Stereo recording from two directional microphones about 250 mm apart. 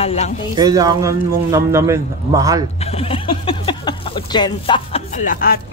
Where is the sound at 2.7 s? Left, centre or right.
Left.